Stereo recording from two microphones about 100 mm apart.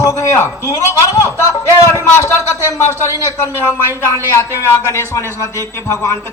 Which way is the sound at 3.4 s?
35° left (ahead or behind).